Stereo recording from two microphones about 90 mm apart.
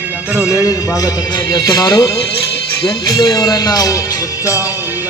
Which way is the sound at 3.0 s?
50° left (ahead or behind).